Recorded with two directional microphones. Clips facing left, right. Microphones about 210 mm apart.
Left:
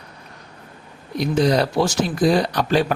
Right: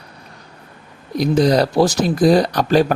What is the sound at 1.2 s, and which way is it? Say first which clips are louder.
Speech: right 3 dB; 35° right (ahead or behind).